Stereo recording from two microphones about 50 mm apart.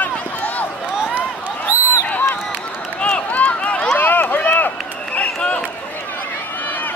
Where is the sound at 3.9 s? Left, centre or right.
Left.